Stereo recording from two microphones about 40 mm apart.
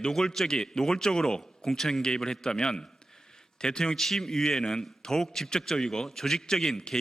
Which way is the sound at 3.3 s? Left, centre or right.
Centre.